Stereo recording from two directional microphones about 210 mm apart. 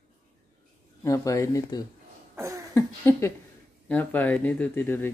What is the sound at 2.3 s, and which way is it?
Cough, 15° right (ahead or behind).